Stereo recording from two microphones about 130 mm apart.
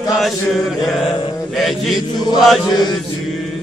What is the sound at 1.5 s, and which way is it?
Speech, centre (ahead or behind).